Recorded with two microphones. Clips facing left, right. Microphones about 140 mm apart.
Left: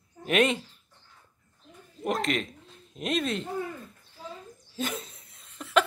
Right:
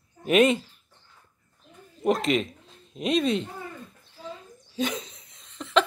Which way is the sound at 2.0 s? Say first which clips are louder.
Right 5 dB; centre (ahead or behind).